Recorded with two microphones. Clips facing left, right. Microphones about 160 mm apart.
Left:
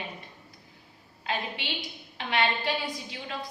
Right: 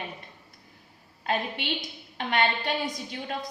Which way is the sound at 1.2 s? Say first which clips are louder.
Right 4 dB; 50° right (ahead or behind).